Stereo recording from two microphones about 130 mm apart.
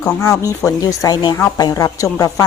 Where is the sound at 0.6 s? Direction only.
25° left (ahead or behind).